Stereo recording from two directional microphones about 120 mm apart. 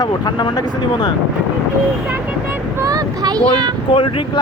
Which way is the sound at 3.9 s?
45° left (ahead or behind).